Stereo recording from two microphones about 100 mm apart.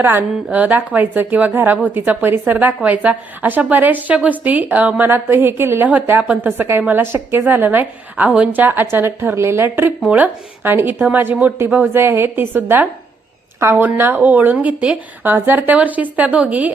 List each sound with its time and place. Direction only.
0.0 s a woman's voice: 20° right (ahead or behind)